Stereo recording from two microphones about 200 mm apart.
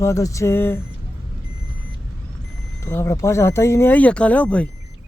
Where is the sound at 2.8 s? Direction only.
15° left (ahead or behind).